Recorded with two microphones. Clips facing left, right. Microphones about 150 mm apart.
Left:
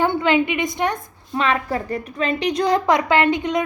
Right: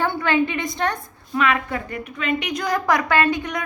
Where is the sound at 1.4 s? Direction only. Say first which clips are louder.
Left 1 dB; 35° left (ahead or behind).